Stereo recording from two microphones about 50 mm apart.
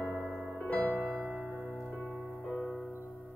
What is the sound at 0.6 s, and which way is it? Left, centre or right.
Music, left.